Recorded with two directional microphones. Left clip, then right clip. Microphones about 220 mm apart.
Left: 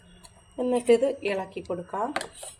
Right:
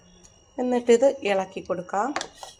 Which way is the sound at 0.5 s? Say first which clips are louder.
Right 2 dB; 15° right (ahead or behind).